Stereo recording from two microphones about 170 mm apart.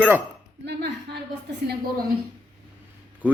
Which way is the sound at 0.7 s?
80° right.